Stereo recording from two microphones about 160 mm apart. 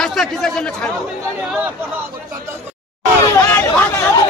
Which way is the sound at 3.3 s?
15° left (ahead or behind).